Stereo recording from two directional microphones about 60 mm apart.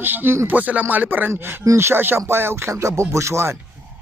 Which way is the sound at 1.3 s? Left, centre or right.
Right.